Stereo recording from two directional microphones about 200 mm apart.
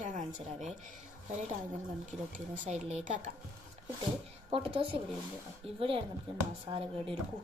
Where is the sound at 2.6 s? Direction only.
35° right (ahead or behind).